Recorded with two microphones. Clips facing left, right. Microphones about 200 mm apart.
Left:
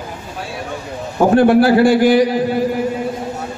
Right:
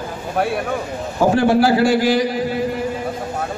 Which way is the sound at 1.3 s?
55° left (ahead or behind).